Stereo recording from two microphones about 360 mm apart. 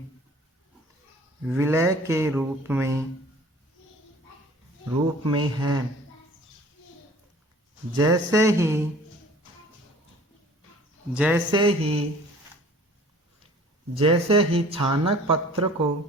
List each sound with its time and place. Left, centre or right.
1.5 s speech: centre
5.2 s speech: centre
7.9 s speech: centre
11.1 s speech: centre
11.6 s speech: centre
13.9 s speech: centre